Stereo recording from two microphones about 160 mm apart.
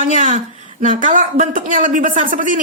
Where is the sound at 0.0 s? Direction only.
55° right (ahead or behind).